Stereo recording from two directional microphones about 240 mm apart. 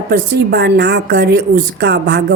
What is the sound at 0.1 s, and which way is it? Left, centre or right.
A woman's voice, right.